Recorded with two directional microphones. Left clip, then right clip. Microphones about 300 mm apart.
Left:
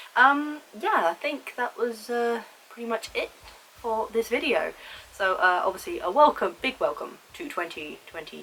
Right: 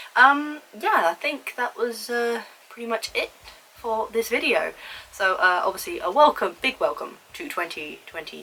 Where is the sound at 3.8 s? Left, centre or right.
Centre.